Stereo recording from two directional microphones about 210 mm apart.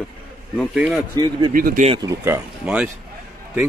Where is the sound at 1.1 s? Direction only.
20° right (ahead or behind).